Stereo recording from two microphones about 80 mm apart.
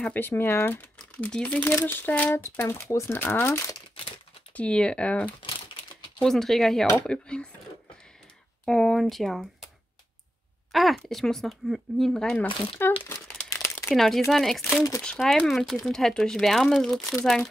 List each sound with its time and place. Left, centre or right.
0.1 s speech: left
0.7 s speech: centre
2.3 s speech: left
4.6 s speech: centre
6.2 s speech: centre
8.6 s speech: centre
10.7 s speech: centre
12.8 s speech: left
13.8 s speech: centre